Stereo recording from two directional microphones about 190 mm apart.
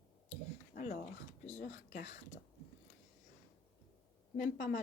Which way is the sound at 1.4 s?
40° left (ahead or behind).